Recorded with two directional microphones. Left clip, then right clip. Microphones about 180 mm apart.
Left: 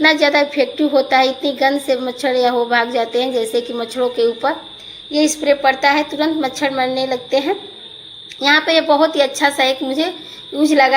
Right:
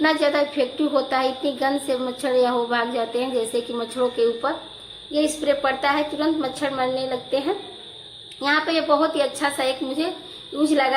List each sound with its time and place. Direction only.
0.0 s a woman's voice: 20° left (ahead or behind)